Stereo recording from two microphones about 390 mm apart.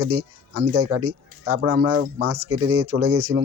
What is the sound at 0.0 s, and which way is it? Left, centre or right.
Speech, right.